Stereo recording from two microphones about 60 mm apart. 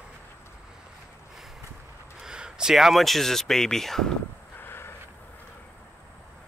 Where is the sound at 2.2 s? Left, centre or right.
Centre.